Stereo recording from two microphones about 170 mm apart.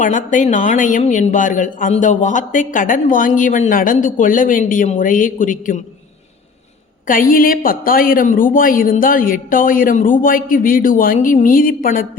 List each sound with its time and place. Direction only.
0.0 s speech: 50° left (ahead or behind)
7.1 s a woman's voice: 55° left (ahead or behind)